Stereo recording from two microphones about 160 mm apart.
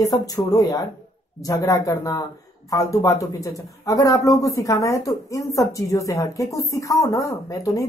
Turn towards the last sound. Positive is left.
turn(degrees=20)  # may be behind; listen again after turning